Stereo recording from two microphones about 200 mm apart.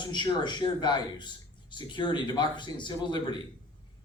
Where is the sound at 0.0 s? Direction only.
20° left (ahead or behind).